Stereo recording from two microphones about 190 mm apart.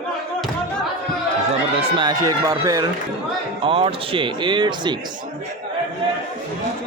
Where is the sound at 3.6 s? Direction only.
30° right (ahead or behind).